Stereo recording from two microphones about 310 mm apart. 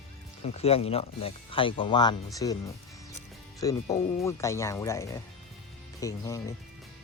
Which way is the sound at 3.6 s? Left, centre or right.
Centre.